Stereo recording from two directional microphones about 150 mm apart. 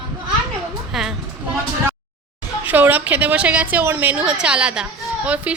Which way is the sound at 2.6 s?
10° right (ahead or behind).